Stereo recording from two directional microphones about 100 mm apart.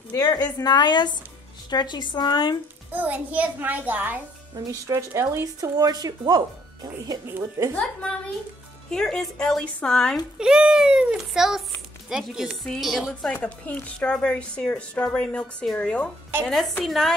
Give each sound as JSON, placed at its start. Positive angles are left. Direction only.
{"t": 0.1, "sound": "a woman's voice", "side_deg": 45}
{"t": 2.9, "sound": "a child's voice", "side_deg": -15}
{"t": 4.8, "sound": "speech", "side_deg": -30}
{"t": 7.2, "sound": "speech", "side_deg": -30}
{"t": 8.9, "sound": "speech", "side_deg": 5}
{"t": 10.4, "sound": "a child's voice", "side_deg": -10}
{"t": 13.3, "sound": "speech", "side_deg": 15}